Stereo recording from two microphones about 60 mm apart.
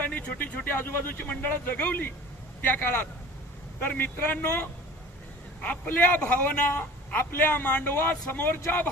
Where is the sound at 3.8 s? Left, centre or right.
Left.